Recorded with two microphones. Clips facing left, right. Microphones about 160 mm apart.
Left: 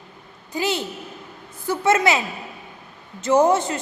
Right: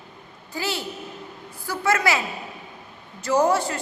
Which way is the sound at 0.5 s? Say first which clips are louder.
Left 4 dB; 20° left (ahead or behind).